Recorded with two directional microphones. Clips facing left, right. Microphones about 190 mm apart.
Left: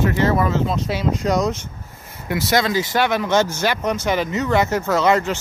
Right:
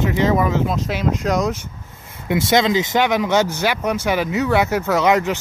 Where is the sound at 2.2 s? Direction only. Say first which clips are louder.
Right 3 dB; 20° right (ahead or behind).